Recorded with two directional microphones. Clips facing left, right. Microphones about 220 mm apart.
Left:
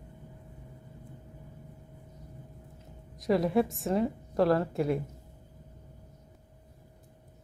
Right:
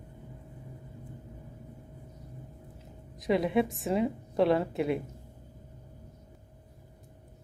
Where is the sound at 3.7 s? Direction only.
Centre (ahead or behind).